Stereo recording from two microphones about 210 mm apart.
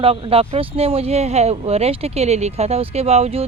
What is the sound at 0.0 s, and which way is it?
Speech, 25° right (ahead or behind).